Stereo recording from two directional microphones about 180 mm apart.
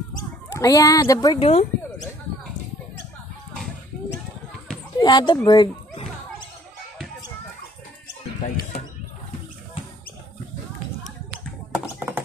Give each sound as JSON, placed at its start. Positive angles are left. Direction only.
{"t": 0.5, "sound": "speech", "side_deg": 20}
{"t": 1.4, "sound": "speech", "side_deg": 35}
{"t": 5.0, "sound": "speech", "side_deg": 25}
{"t": 11.7, "sound": "a sound", "side_deg": -10}